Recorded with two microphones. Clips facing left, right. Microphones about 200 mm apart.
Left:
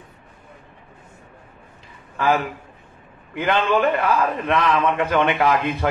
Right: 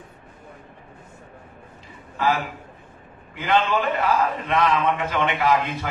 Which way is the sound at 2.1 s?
55° left (ahead or behind).